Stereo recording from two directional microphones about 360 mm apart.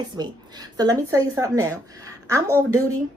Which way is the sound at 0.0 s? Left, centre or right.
Centre.